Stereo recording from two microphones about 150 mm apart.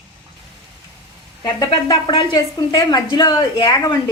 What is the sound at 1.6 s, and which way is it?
A woman's voice, 25° left (ahead or behind).